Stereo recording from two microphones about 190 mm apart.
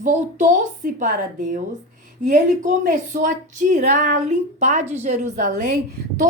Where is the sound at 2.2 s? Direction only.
40° right (ahead or behind).